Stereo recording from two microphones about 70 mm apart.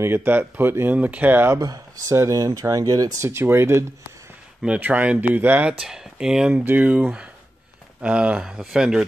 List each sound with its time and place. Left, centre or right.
0.0 s speech: right
0.9 s speech: right
1.6 s speech: right
2.0 s speech: right
3.3 s speech: right
4.7 s speech: right
5.7 s speech: centre
6.6 s speech: right
6.9 s speech: centre